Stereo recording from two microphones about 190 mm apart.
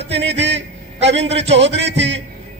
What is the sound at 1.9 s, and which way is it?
Speech, 70° right (ahead or behind).